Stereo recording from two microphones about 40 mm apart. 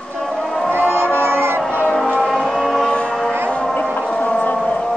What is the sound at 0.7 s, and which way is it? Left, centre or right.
Music, right.